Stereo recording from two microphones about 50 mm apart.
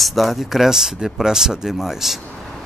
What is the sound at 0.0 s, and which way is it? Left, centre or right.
Speech, centre.